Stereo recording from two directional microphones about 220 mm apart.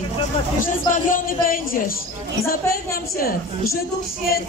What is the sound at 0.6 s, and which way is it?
Speech, 40° left (ahead or behind).